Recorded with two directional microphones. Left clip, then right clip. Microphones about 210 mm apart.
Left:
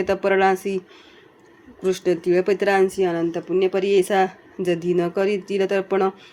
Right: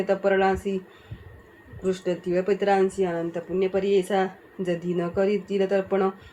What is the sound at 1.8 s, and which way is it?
Speech, 50° left (ahead or behind).